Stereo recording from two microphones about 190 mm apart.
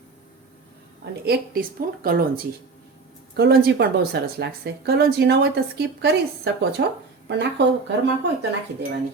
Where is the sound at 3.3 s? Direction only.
60° right (ahead or behind).